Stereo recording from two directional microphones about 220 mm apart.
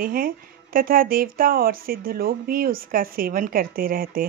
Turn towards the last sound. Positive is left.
turn(degrees=-40)  # may be behind; listen again after turning